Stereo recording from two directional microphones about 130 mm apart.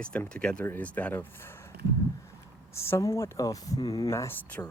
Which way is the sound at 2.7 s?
20° left (ahead or behind).